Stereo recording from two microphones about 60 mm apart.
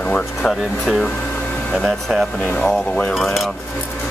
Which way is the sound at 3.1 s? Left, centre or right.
Centre.